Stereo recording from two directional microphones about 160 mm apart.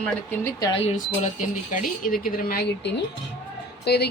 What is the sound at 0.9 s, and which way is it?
A woman's voice, 55° left (ahead or behind).